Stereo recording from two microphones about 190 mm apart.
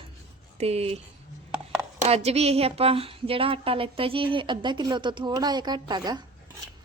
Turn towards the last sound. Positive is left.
turn(degrees=-20)  # may be behind; listen again after turning